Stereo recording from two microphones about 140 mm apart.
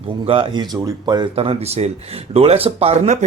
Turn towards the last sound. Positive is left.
turn(degrees=-55)  # may be behind; listen again after turning